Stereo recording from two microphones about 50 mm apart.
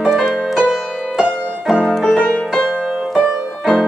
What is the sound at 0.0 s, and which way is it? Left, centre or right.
Music, centre.